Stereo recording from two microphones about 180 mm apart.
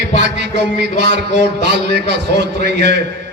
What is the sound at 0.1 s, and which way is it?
A man's voice, 75° right (ahead or behind).